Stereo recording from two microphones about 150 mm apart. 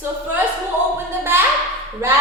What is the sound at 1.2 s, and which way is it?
Speech, 15° right (ahead or behind).